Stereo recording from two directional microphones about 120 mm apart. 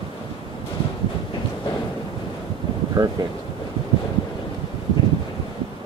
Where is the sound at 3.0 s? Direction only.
35° right (ahead or behind).